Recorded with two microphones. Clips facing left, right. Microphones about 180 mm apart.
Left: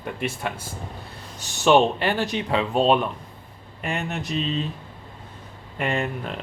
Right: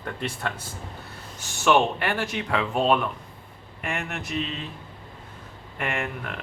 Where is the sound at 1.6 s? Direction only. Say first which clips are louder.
Left 3 dB; 20° left (ahead or behind).